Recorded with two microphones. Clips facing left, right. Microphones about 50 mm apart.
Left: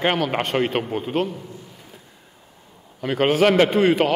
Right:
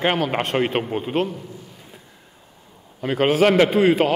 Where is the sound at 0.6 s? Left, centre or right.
Right.